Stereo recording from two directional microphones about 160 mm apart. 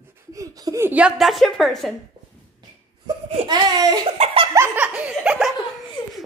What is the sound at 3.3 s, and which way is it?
Speech, 30° right (ahead or behind).